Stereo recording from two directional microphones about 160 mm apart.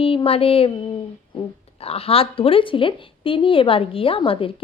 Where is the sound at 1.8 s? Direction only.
40° left (ahead or behind).